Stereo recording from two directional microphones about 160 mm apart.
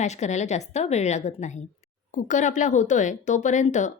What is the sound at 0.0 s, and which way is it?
Speech, 45° left (ahead or behind).